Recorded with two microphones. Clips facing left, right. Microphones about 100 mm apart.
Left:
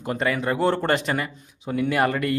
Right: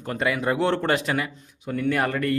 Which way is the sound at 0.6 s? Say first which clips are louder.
Left 1 dB; 5° left (ahead or behind).